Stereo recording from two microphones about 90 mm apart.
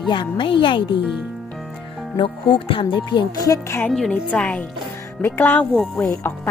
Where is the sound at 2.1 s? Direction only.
75° left (ahead or behind); by 3.6 s 45° left (ahead or behind).